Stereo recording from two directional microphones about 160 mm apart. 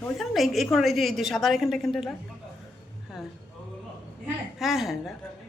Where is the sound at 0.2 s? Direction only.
Centre (ahead or behind).